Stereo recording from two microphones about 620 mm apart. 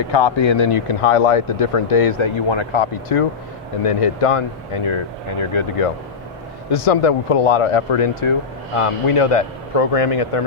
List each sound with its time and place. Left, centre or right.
0.1 s speech: left